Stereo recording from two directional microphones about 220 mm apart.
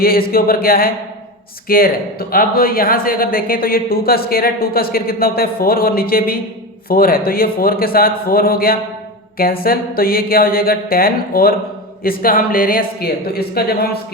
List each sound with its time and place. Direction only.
0.0 s a man's voice: 45° left (ahead or behind)